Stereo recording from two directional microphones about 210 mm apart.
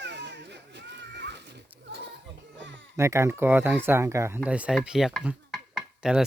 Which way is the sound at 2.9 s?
15° right (ahead or behind).